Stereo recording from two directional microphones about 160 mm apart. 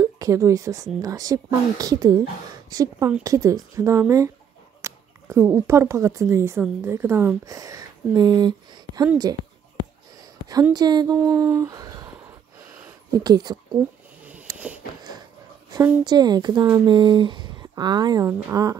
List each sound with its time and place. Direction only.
0.0 s speech: 20° right (ahead or behind)
10.7 s speech: 25° right (ahead or behind)
11.3 s a sound: 20° right (ahead or behind)
13.1 s speech: 25° right (ahead or behind)
15.7 s speech: 25° right (ahead or behind)